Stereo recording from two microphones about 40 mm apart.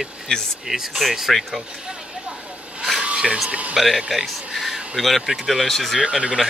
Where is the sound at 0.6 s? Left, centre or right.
Centre.